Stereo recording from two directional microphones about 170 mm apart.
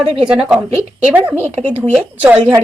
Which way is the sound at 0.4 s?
5° right (ahead or behind).